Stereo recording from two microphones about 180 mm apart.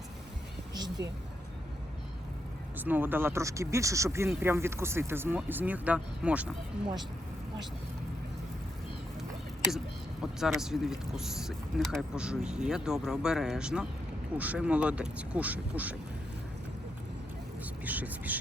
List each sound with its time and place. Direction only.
0.7 s a sound: 20° right (ahead or behind)
2.7 s speech: 10° right (ahead or behind)
9.7 s speech: centre (ahead or behind)
17.8 s speech: 10° right (ahead or behind)